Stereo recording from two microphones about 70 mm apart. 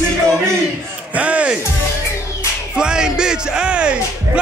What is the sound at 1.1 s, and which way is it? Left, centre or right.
Music, centre.